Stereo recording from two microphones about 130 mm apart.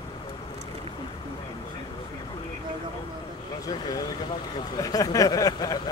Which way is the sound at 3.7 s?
30° left (ahead or behind).